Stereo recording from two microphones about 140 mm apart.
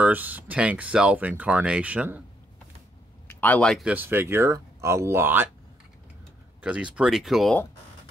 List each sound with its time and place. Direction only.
0.0 s speech: 10° right (ahead or behind)
3.3 s speech: 15° left (ahead or behind)
3.7 s speech: 10° right (ahead or behind)
6.6 s speech: 10° right (ahead or behind)